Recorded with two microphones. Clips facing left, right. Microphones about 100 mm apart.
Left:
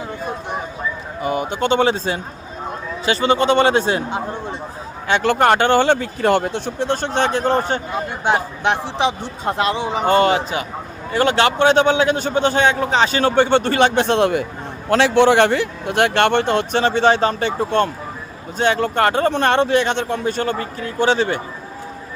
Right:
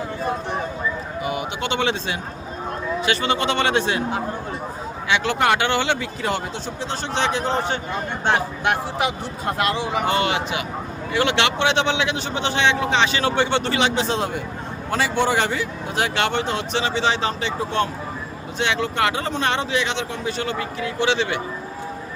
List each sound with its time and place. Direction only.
1.2 s a man's voice: 40° left (ahead or behind)
5.0 s a man's voice: 50° left (ahead or behind)
8.2 s speech: 20° left (ahead or behind)
10.1 s a man's voice: 40° left (ahead or behind)